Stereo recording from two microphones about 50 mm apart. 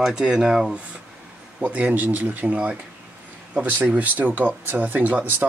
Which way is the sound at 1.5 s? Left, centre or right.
Right.